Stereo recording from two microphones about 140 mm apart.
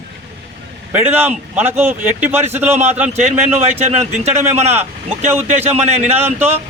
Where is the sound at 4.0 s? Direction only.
55° right (ahead or behind).